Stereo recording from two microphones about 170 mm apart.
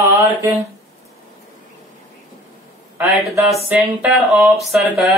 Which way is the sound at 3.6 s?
5° right (ahead or behind).